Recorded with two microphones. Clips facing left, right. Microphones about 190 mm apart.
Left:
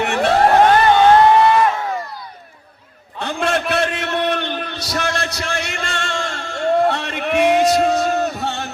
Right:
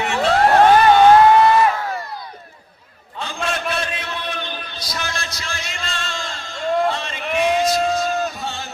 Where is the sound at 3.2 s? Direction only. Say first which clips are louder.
Left 5 dB; 65° left (ahead or behind).